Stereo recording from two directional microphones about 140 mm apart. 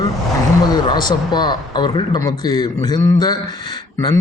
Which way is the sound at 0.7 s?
30° left (ahead or behind).